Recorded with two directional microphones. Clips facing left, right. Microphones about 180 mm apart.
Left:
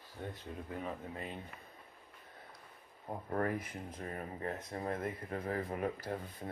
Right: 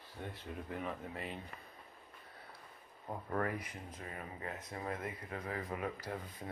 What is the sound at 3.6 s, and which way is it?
Speech, 50° left (ahead or behind).